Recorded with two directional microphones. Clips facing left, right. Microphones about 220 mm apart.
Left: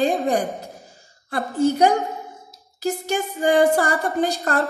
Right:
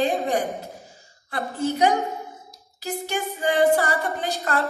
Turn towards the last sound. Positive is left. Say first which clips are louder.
# left 5 dB
turn(degrees=45)  # may be behind; listen again after turning